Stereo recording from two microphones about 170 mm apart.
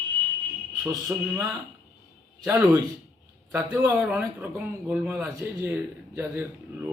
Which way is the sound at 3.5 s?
15° right (ahead or behind).